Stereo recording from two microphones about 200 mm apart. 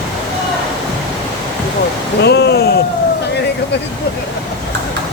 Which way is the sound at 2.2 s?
55° left (ahead or behind).